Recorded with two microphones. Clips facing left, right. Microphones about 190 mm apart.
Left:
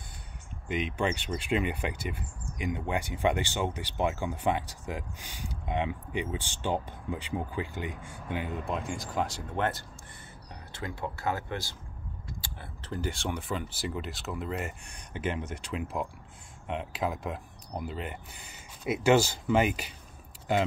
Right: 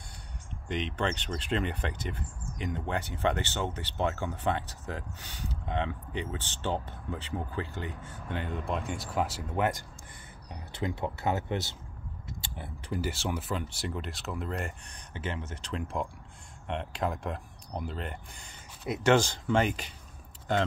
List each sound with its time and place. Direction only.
0.7 s speech: 10° left (ahead or behind); by 12.9 s 20° right (ahead or behind)
12.9 s speech: 5° right (ahead or behind)
15.1 s speech: 15° left (ahead or behind)